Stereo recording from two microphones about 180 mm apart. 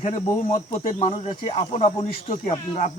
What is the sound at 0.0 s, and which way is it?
Speech, 40° left (ahead or behind).